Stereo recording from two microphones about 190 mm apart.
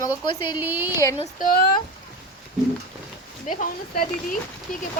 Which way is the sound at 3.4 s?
45° left (ahead or behind).